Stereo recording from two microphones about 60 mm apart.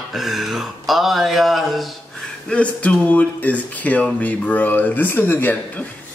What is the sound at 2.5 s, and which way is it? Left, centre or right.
Speech, left.